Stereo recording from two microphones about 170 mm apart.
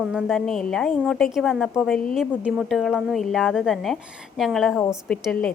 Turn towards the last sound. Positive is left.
turn(degrees=5)  # may be behind; listen again after turning